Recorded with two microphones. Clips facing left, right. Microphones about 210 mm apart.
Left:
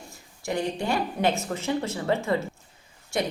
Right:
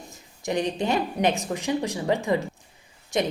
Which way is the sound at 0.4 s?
20° right (ahead or behind).